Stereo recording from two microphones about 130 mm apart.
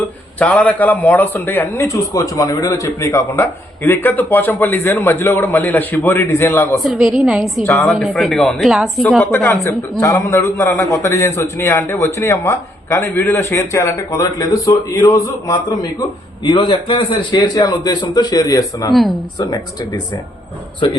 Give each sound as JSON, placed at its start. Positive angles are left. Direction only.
{"t": 0.3, "sound": "a man's voice", "side_deg": 10}
{"t": 6.8, "sound": "a woman's voice", "side_deg": -5}
{"t": 7.6, "sound": "a man's voice", "side_deg": 20}
{"t": 8.1, "sound": "a man's voice", "side_deg": 5}